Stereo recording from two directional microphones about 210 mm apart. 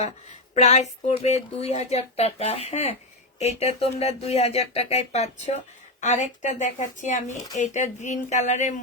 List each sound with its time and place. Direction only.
0.5 s speech: 35° left (ahead or behind)